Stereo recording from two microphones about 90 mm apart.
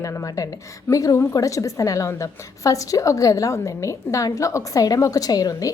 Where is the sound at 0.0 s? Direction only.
35° left (ahead or behind).